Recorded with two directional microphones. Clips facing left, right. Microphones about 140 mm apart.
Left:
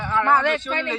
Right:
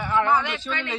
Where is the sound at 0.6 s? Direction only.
40° left (ahead or behind).